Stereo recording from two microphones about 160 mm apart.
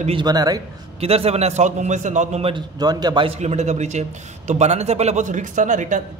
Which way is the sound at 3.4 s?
45° right (ahead or behind).